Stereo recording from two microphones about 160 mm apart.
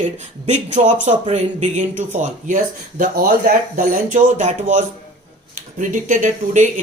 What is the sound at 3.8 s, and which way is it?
Speech, 50° right (ahead or behind).